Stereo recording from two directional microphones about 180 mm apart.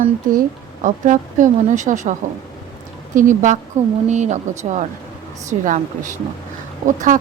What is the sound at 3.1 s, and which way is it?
A woman's voice, 45° right (ahead or behind).